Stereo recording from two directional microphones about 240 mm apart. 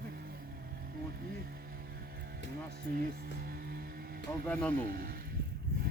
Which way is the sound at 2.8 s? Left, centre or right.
Right.